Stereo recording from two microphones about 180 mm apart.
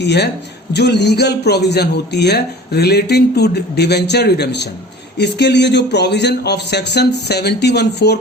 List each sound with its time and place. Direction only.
0.0 s a man's voice: 70° left (ahead or behind)